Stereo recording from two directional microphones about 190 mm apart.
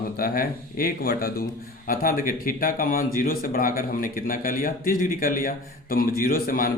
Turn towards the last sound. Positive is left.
turn(degrees=50)  # may be behind; listen again after turning